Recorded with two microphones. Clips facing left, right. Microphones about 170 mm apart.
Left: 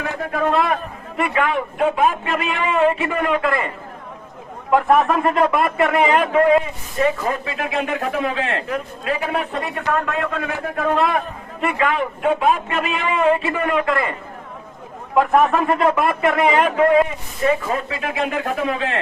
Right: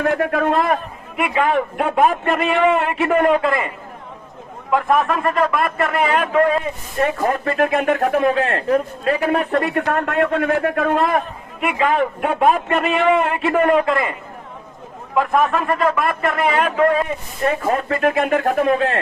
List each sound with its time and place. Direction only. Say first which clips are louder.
0.0 s a man's voice: right 4 dB; 60° right (ahead or behind)
1.1 s a man's voice: even; 10° right (ahead or behind)
1.5 s a man's voice: right 1 dB; 55° right (ahead or behind)
3.2 s speech: right 5 dB; 45° right (ahead or behind)
4.7 s a man's voice: left 2 dB; 5° left (ahead or behind)
5.2 s speech: left 1 dB; 25° left (ahead or behind)
5.5 s a man's voice: left 2 dB; 5° left (ahead or behind)
7.0 s a man's voice: right 1 dB; 55° right (ahead or behind)
13.8 s a man's voice: right 1 dB; 20° right (ahead or behind)
15.1 s a man's voice: left 2 dB; 5° left (ahead or behind)
17.4 s speech: even; 55° right (ahead or behind)